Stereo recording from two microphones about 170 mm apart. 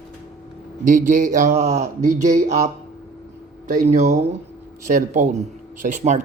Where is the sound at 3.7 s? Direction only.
45° right (ahead or behind).